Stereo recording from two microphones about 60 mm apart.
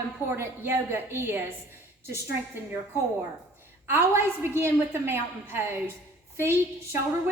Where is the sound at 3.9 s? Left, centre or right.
Right.